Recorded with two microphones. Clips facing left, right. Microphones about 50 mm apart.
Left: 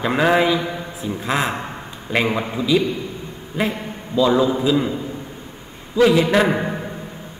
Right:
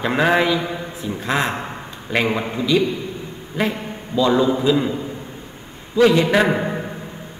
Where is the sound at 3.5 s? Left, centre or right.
Centre.